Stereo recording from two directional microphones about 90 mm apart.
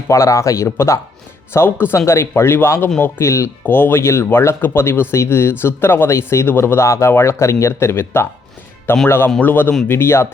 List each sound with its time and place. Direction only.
0.1 s speech: 35° left (ahead or behind)